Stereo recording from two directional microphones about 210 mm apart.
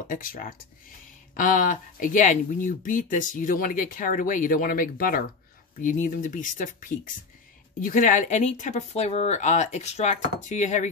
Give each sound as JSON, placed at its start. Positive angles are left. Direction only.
{"t": 0.1, "sound": "speech", "side_deg": 40}